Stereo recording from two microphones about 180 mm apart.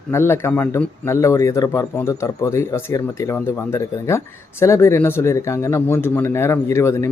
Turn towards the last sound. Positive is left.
turn(degrees=15)  # may be behind; listen again after turning